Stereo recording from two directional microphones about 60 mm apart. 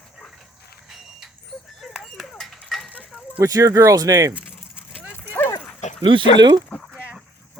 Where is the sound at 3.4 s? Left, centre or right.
Right.